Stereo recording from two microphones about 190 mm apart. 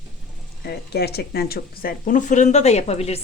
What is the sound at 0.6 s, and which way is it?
Speech, 55° left (ahead or behind).